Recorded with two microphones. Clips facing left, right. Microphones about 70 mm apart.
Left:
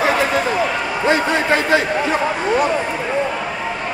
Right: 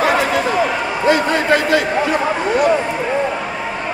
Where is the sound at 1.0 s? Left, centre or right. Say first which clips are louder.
Right 2 dB; left.